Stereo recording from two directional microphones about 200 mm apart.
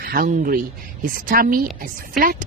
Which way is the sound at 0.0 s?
45° right (ahead or behind).